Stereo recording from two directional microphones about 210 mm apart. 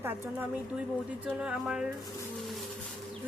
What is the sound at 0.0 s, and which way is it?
A woman's voice, 10° right (ahead or behind).